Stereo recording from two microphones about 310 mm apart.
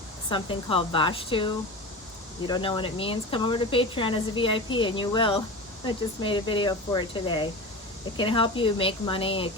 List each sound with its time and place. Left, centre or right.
0.3 s a woman's voice: centre